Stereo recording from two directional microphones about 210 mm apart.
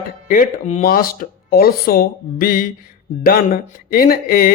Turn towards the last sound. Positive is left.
turn(degrees=45)  # may be behind; listen again after turning